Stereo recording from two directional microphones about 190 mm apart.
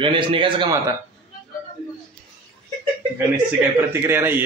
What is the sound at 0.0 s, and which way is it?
Speech, 25° right (ahead or behind).